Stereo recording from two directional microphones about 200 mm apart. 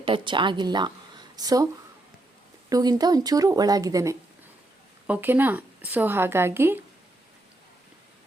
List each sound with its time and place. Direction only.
0.0 s speech: 25° right (ahead or behind)
2.6 s a woman's voice: 20° right (ahead or behind)